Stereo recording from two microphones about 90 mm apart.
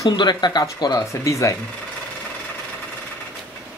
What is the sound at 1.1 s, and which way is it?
Speech, 35° left (ahead or behind).